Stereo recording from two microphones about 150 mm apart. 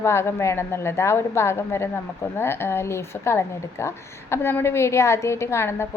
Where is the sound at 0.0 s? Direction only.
15° left (ahead or behind).